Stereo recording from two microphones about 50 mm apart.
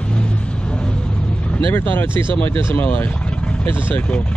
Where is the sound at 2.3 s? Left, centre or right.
Left.